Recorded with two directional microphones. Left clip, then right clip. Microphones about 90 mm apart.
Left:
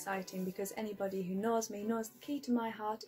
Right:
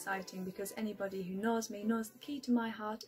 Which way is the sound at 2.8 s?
20° right (ahead or behind).